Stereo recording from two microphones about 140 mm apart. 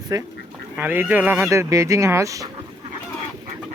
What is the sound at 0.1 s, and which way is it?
Speech, 25° right (ahead or behind).